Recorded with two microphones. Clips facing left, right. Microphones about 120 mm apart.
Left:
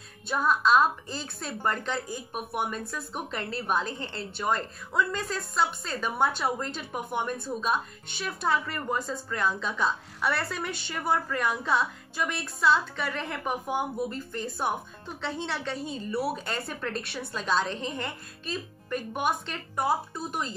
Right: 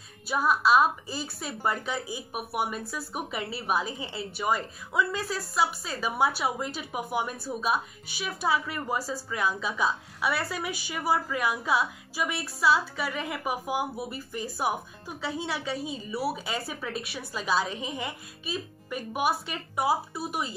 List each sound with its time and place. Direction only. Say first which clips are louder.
0.3 s a woman's voice: even; 5° right (ahead or behind)